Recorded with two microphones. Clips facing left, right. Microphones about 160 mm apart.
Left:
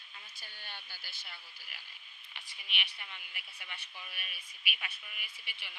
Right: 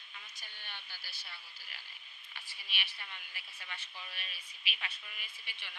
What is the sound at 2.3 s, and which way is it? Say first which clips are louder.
A woman's voice: left 2 dB; 20° left (ahead or behind).